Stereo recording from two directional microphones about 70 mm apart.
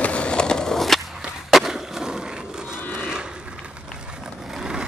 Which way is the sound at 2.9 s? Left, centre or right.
Centre.